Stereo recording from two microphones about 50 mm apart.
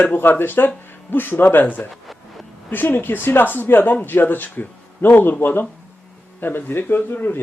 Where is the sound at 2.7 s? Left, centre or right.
Left.